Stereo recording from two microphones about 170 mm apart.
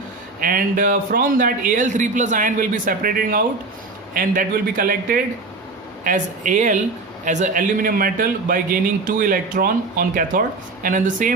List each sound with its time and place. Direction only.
0.3 s speech: 55° right (ahead or behind)